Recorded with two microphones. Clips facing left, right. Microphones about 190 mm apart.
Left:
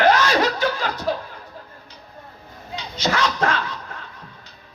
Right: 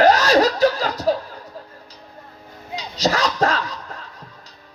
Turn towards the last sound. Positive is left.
turn(degrees=-40)  # may be behind; listen again after turning